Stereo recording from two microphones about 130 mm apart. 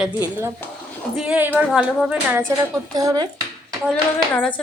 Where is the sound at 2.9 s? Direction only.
30° right (ahead or behind).